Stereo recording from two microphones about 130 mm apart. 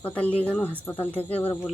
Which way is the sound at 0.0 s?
10° left (ahead or behind).